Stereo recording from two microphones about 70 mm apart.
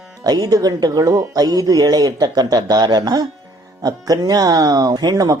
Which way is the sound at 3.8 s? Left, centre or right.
Right.